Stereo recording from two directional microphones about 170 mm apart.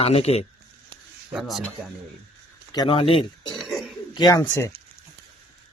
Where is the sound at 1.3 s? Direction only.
Centre (ahead or behind).